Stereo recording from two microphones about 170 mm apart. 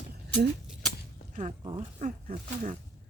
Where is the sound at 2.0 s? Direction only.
50° right (ahead or behind).